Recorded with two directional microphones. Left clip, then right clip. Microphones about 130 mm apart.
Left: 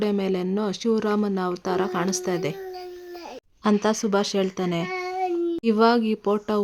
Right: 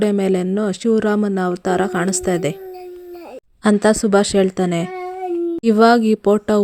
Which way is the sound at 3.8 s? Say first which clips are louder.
Right 8 dB; 30° right (ahead or behind).